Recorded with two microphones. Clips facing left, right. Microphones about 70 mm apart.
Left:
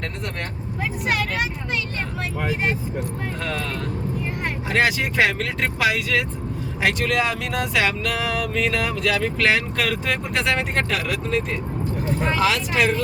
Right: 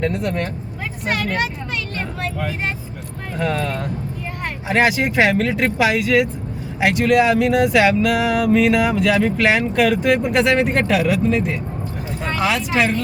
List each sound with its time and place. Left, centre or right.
0.0 s speech: centre
3.4 s speech: centre
4.7 s speech: centre